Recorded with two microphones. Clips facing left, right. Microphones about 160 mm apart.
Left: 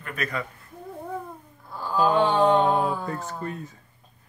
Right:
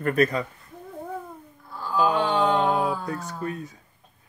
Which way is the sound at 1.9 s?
5° right (ahead or behind).